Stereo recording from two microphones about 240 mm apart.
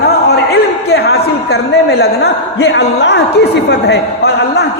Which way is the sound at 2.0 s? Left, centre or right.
Left.